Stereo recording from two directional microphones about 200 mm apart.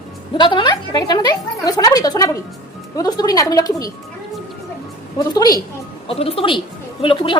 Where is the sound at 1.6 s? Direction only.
20° left (ahead or behind).